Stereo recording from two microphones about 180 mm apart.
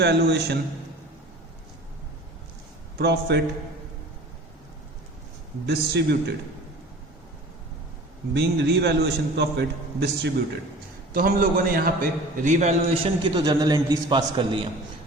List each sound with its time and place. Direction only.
0.0 s a man's voice: 65° right (ahead or behind)
3.0 s a man's voice: 70° right (ahead or behind)
5.6 s a man's voice: 65° right (ahead or behind)
8.3 s a man's voice: 70° right (ahead or behind)
11.1 s a man's voice: 55° right (ahead or behind); by 14.7 s 25° right (ahead or behind)